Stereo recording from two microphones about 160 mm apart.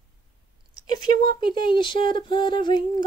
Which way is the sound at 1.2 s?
30° left (ahead or behind).